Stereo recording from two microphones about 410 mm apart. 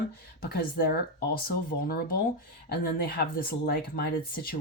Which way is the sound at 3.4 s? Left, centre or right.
Left.